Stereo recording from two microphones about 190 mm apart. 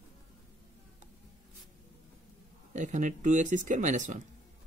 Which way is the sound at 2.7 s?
40° right (ahead or behind).